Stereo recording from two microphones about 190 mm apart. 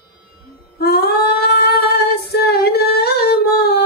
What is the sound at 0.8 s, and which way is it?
Female singing, 55° left (ahead or behind).